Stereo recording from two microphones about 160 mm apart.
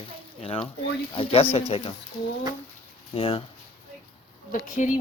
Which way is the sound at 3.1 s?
35° left (ahead or behind).